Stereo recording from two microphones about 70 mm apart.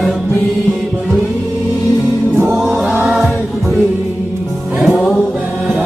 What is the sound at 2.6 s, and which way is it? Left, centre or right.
Chant, centre.